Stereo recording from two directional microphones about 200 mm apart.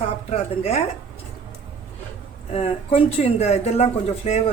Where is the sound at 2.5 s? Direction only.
30° left (ahead or behind).